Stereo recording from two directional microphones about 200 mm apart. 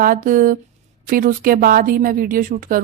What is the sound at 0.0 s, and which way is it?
Speech, 45° right (ahead or behind).